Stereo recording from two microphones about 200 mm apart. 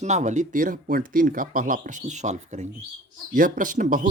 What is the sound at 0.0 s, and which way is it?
Speech, 35° right (ahead or behind).